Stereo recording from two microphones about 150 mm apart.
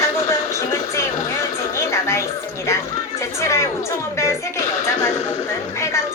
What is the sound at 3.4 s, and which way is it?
Speech, 20° left (ahead or behind).